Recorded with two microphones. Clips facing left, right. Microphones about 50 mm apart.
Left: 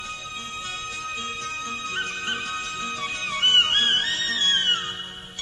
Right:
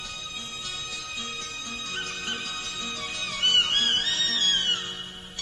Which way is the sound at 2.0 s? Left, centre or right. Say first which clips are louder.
Left 4 dB; left.